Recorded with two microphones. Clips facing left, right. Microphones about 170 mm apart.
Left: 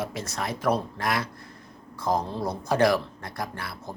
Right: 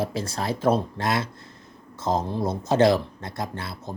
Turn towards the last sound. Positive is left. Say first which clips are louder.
# right 2 dB
turn(degrees=-25)  # may be behind; listen again after turning